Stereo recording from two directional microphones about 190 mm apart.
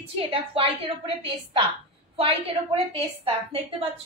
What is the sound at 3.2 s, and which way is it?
Speech, 30° right (ahead or behind).